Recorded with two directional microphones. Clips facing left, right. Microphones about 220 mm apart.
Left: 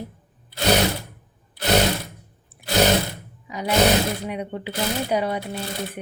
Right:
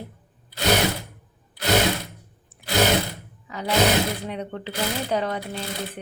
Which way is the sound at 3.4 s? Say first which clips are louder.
Left 2 dB; 15° left (ahead or behind).